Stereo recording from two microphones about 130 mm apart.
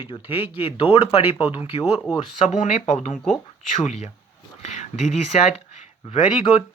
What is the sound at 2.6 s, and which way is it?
Speech, 70° left (ahead or behind).